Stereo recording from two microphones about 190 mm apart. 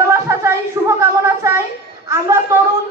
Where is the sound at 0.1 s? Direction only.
15° right (ahead or behind).